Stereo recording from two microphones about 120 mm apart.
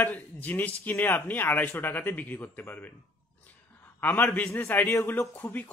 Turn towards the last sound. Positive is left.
turn(degrees=15)  # may be behind; listen again after turning